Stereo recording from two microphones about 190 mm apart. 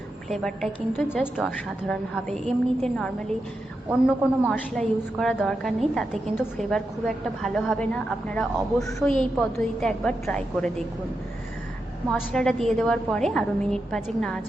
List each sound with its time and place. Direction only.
0.3 s a woman's voice: centre (ahead or behind)
9.0 s a woman's voice: 5° left (ahead or behind)
12.1 s a woman's voice: 5° left (ahead or behind)